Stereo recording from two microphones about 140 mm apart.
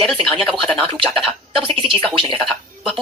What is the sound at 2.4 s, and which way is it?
Speech, centre (ahead or behind).